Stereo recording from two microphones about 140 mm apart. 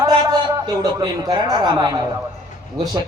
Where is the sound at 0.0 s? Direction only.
30° right (ahead or behind).